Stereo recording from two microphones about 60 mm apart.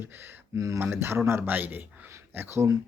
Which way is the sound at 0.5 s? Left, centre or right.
Right.